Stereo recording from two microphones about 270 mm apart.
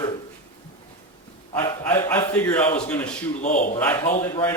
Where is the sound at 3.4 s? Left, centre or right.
Left.